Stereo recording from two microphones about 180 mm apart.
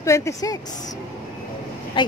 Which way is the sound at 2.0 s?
25° left (ahead or behind).